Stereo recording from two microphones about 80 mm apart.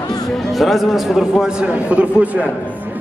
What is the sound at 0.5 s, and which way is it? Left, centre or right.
A man's voice, centre.